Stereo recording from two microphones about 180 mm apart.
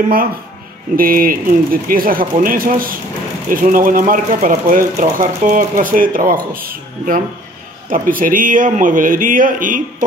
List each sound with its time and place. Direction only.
0.9 s speech: 55° right (ahead or behind)